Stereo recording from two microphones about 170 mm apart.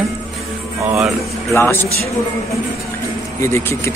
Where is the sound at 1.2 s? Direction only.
15° left (ahead or behind).